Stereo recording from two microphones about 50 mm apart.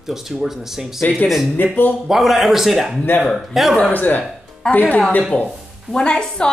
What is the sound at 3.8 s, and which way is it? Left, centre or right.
Speech, left.